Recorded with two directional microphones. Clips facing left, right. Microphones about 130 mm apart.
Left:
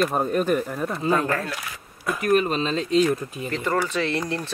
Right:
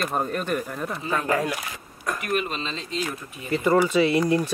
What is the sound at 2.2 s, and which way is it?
Speech, 40° left (ahead or behind).